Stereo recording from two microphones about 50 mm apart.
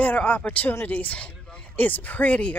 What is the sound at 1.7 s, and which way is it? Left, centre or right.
Speech, left.